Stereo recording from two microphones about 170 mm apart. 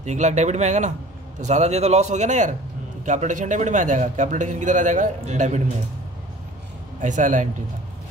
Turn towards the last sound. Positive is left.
turn(degrees=-50)  # may be behind; listen again after turning